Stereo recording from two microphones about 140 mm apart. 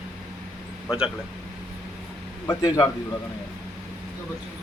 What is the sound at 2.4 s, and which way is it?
Speech, 20° left (ahead or behind).